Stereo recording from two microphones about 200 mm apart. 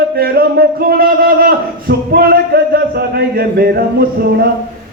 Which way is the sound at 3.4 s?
50° right (ahead or behind).